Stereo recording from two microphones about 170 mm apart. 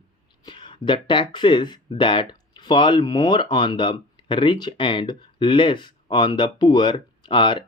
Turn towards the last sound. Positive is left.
turn(degrees=30)  # may be behind; listen again after turning